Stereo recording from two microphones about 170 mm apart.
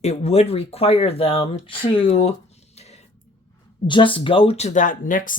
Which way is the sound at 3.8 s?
30° left (ahead or behind).